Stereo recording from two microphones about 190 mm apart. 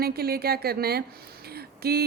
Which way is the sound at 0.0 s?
55° right (ahead or behind).